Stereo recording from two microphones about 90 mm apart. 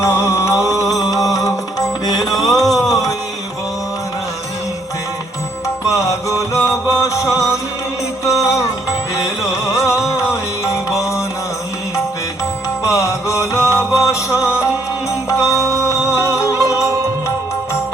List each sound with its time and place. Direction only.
0.0 s music: 35° left (ahead or behind)
2.9 s a sound: 40° left (ahead or behind)
5.9 s music: 35° left (ahead or behind)
12.8 s music: 35° left (ahead or behind)